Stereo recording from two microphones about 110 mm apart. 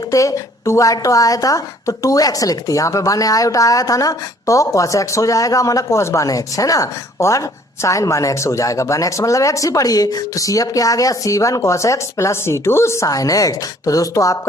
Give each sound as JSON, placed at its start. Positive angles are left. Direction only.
{"t": 0.1, "sound": "a woman's voice", "side_deg": 30}